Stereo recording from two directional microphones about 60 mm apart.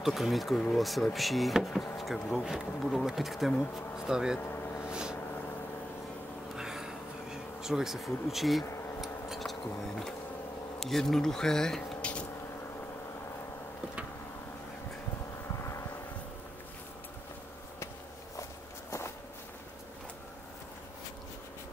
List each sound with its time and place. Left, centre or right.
0.0 s speech: centre
4.4 s vehicle: left
6.5 s bee: centre
10.8 s speech: centre
18.9 s walk: left